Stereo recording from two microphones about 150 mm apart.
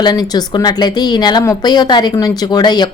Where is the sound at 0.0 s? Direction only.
25° left (ahead or behind).